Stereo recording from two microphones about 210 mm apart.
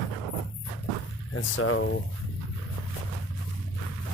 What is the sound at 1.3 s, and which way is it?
Speech, 70° left (ahead or behind).